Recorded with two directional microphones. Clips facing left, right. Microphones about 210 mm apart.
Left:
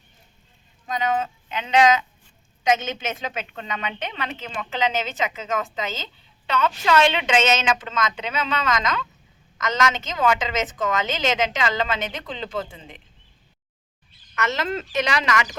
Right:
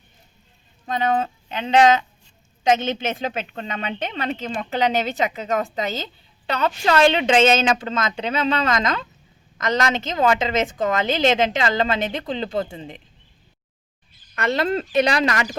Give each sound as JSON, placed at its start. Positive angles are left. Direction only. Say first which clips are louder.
{"t": 0.9, "sound": "a woman's voice", "louder": "right 3 dB", "side_deg": -35}
{"t": 14.3, "sound": "a woman's voice", "louder": "right 4 dB", "side_deg": -35}